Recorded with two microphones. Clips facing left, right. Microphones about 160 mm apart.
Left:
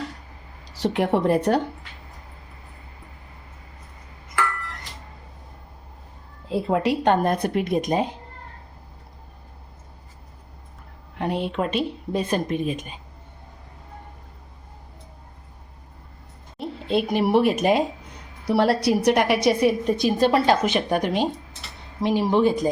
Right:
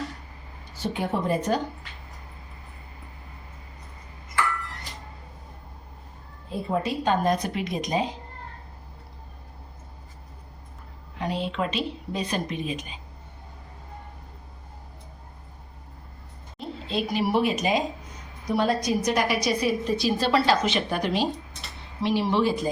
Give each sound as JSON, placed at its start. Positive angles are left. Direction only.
{"t": 0.6, "sound": "speech", "side_deg": 85}
{"t": 6.5, "sound": "speech", "side_deg": 75}
{"t": 11.2, "sound": "a woman's voice", "side_deg": 55}
{"t": 16.6, "sound": "a sound", "side_deg": 60}
{"t": 17.3, "sound": "speech", "side_deg": 55}
{"t": 18.4, "sound": "a woman's voice", "side_deg": 70}
{"t": 22.3, "sound": "a woman's voice", "side_deg": 45}